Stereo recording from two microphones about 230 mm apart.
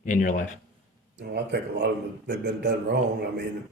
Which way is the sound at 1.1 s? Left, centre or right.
Right.